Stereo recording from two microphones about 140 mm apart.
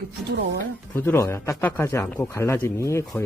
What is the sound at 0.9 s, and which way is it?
Speech, 15° left (ahead or behind).